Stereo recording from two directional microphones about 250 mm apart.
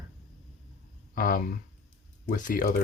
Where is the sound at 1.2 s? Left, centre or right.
Left.